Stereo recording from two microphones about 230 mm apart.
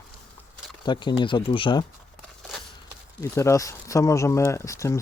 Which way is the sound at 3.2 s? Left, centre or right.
Centre.